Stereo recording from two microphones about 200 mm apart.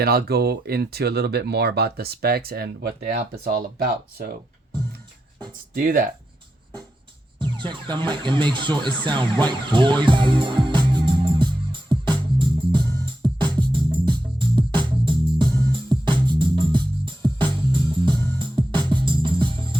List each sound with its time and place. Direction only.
0.0 s speech: 50° right (ahead or behind)
5.7 s speech: 45° right (ahead or behind)
7.6 s car alarm: 25° right (ahead or behind)
13.2 s music: 20° right (ahead or behind)